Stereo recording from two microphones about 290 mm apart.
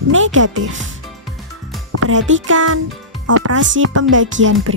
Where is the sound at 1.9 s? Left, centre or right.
Right.